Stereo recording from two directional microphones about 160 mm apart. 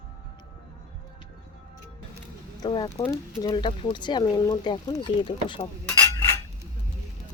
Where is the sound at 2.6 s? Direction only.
25° left (ahead or behind).